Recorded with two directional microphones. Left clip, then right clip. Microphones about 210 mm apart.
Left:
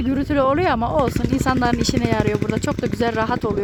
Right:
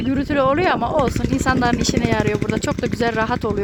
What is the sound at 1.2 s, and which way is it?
A woman's voice, centre (ahead or behind).